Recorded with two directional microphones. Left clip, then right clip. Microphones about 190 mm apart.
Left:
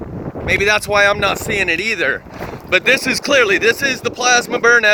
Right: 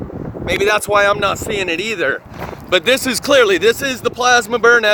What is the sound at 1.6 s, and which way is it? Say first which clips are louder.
Speech: left 4 dB; 70° right (ahead or behind).